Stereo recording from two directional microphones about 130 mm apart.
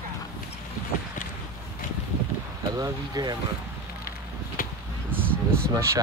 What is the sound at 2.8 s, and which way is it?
Speech, 30° right (ahead or behind).